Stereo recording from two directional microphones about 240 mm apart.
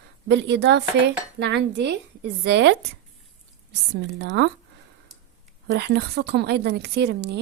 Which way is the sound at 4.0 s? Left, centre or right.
Right.